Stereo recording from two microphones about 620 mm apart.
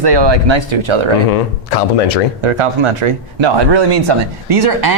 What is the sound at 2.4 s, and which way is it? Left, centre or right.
Speech, right.